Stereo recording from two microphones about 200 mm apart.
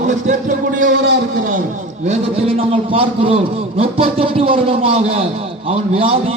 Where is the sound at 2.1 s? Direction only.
30° right (ahead or behind).